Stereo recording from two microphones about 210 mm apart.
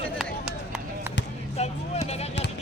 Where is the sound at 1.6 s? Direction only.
30° left (ahead or behind).